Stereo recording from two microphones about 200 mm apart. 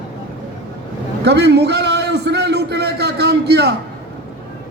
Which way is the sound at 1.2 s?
55° right (ahead or behind).